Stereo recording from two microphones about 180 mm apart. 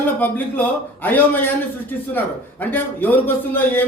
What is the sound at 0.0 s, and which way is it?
Speech, 10° left (ahead or behind).